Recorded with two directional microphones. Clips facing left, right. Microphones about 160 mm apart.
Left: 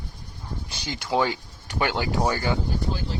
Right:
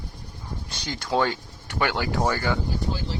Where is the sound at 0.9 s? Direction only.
15° left (ahead or behind).